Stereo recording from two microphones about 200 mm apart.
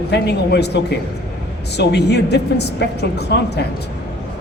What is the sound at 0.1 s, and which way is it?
Speech, 55° left (ahead or behind).